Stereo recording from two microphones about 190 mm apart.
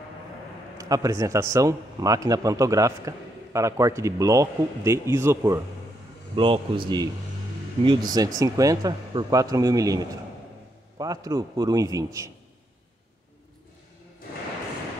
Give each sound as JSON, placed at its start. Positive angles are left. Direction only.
{"t": 0.7, "sound": "a man's voice", "side_deg": -20}
{"t": 6.3, "sound": "speech", "side_deg": -25}
{"t": 7.8, "sound": "speech", "side_deg": -25}